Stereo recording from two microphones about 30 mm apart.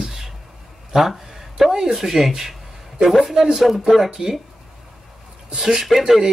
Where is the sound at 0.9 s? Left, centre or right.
Centre.